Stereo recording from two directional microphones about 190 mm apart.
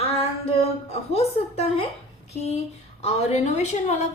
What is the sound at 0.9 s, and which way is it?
A woman's voice, 35° left (ahead or behind).